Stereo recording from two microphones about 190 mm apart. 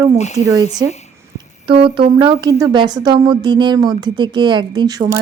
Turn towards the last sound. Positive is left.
turn(degrees=-20)  # may be behind; listen again after turning